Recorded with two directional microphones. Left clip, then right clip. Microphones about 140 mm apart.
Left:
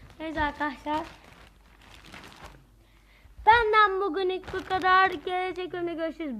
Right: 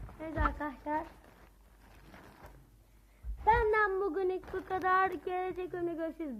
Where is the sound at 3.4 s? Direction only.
10° left (ahead or behind).